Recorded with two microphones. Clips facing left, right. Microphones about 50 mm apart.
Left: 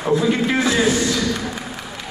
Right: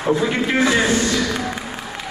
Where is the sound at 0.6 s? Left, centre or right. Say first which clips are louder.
Right 3 dB; right.